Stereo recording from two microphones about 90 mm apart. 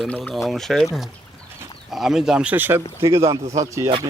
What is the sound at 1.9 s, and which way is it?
Speech, 5° right (ahead or behind).